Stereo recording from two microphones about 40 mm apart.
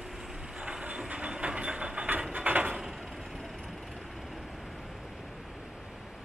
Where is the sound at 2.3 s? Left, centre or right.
Right.